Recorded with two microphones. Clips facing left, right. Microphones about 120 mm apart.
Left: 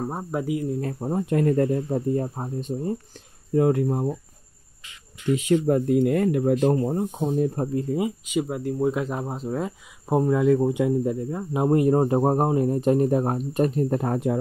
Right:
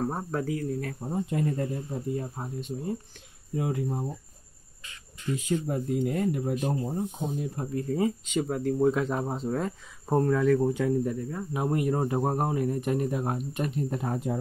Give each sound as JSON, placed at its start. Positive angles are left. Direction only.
{"t": 0.0, "sound": "speech", "side_deg": 10}
{"t": 1.0, "sound": "speech", "side_deg": 60}
{"t": 2.2, "sound": "speech", "side_deg": 35}
{"t": 3.5, "sound": "speech", "side_deg": 55}
{"t": 5.3, "sound": "speech", "side_deg": 80}
{"t": 6.8, "sound": "speech", "side_deg": 70}
{"t": 7.3, "sound": "speech", "side_deg": 45}
{"t": 7.7, "sound": "speech", "side_deg": 15}